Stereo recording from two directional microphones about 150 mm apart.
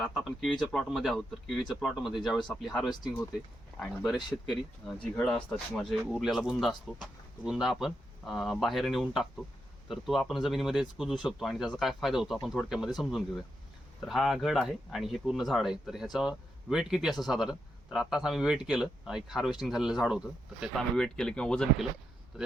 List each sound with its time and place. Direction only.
0.0 s speech: centre (ahead or behind)